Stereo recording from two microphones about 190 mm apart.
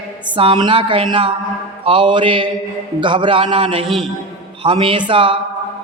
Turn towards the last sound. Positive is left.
turn(degrees=-25)  # may be behind; listen again after turning